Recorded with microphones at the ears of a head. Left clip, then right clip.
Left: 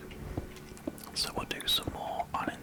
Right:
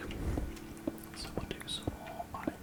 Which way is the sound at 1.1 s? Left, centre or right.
Left.